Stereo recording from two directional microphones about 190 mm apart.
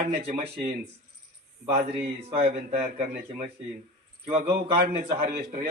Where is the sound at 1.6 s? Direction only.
30° right (ahead or behind).